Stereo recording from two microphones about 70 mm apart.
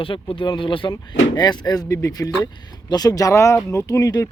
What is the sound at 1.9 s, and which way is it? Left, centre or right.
Speech, left.